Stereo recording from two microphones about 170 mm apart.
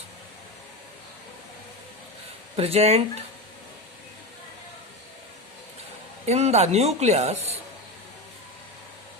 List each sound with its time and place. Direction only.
2.6 s speech: 35° right (ahead or behind)
6.2 s speech: 40° right (ahead or behind)